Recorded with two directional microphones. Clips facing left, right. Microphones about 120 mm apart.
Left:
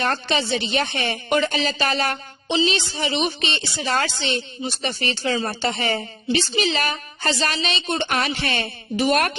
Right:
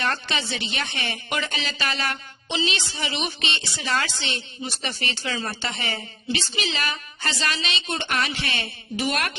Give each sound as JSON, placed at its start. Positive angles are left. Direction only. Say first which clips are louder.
{"t": 0.0, "sound": "a woman's voice", "louder": "left 4 dB", "side_deg": 40}
{"t": 5.6, "sound": "a woman's voice", "louder": "left 7 dB", "side_deg": 40}